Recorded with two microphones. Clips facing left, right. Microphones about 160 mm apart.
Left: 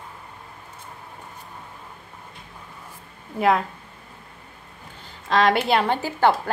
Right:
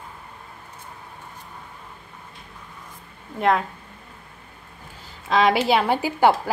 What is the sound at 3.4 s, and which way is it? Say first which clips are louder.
Speech: left 1 dB; 5° left (ahead or behind).